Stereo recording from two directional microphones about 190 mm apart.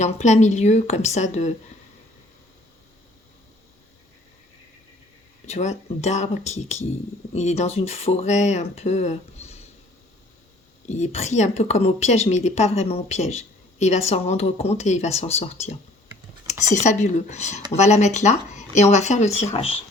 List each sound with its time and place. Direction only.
0.0 s a woman's voice: 35° left (ahead or behind)
5.5 s a woman's voice: 35° left (ahead or behind)
10.8 s a woman's voice: 40° left (ahead or behind)